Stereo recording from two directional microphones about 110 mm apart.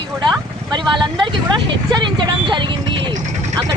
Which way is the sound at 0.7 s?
45° right (ahead or behind).